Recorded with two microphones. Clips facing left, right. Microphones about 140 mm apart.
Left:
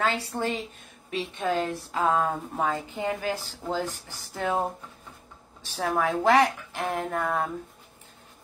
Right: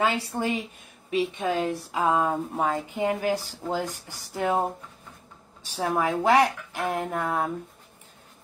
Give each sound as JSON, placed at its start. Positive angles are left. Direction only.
{"t": 0.0, "sound": "a woman's voice", "side_deg": -10}
{"t": 5.7, "sound": "a woman's voice", "side_deg": -10}